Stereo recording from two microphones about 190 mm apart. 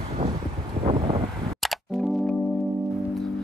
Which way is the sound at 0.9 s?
30° right (ahead or behind).